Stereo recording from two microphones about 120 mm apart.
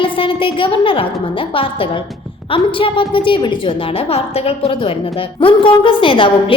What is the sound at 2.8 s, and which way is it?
Speech, 45° left (ahead or behind).